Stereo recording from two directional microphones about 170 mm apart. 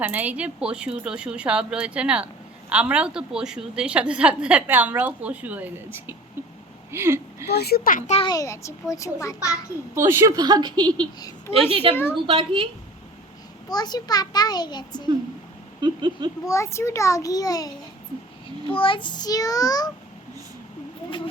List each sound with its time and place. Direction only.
0.0 s speech: 10° right (ahead or behind)
7.4 s a child's voice: 70° left (ahead or behind); by 8.2 s 45° left (ahead or behind)
8.2 s a child's voice: 20° left (ahead or behind)
9.9 s a woman's voice: 15° right (ahead or behind)
11.2 s a woman's voice: 20° left (ahead or behind)
11.5 s a woman's voice: 35° right (ahead or behind)
13.7 s a child's voice: 25° left (ahead or behind)
15.8 s a woman's voice: 25° right (ahead or behind)
16.5 s a child's voice: 15° left (ahead or behind)
18.7 s a child's voice: 30° left (ahead or behind)